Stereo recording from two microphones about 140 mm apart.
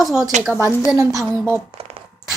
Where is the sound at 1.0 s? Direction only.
25° right (ahead or behind).